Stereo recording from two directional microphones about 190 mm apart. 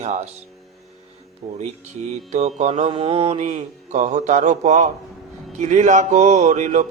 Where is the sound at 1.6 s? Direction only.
35° right (ahead or behind).